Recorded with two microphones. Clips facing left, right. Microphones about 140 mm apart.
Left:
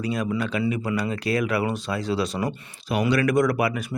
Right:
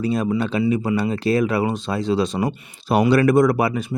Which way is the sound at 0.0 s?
30° right (ahead or behind).